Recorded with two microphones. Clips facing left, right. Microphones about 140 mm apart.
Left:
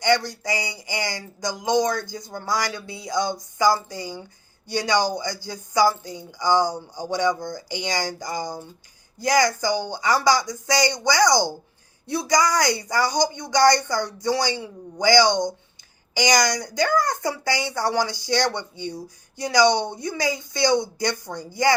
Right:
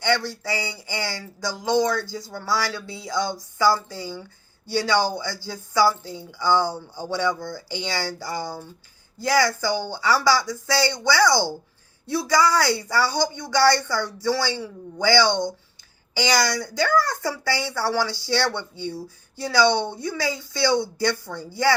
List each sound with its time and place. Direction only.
0.0 s speech: 15° left (ahead or behind)
1.9 s speech: 45° left (ahead or behind)
2.2 s speech: 20° left (ahead or behind)